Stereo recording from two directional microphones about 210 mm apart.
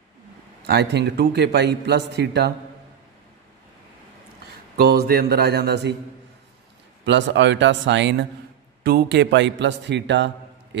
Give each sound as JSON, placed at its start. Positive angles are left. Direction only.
{"t": 0.7, "sound": "a man's voice", "side_deg": -55}
{"t": 4.7, "sound": "a man's voice", "side_deg": -50}
{"t": 7.1, "sound": "a man's voice", "side_deg": -60}